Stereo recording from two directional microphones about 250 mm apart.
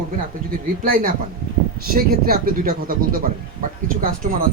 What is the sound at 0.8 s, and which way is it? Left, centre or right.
Speech, right.